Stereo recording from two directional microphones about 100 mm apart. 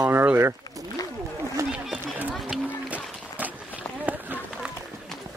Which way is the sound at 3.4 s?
15° right (ahead or behind).